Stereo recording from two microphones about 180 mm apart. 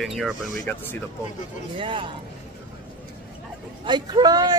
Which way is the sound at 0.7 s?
10° left (ahead or behind).